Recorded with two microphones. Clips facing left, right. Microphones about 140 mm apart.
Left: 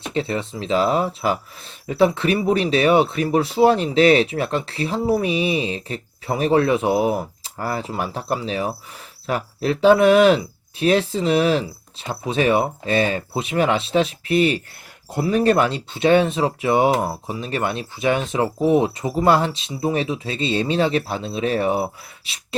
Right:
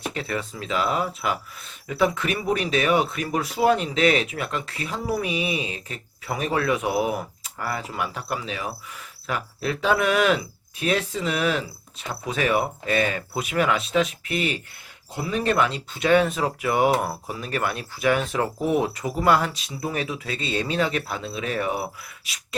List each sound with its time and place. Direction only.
0.0 s speech: 25° left (ahead or behind)